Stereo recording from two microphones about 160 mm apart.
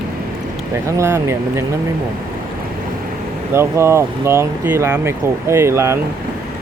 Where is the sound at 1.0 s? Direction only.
15° right (ahead or behind).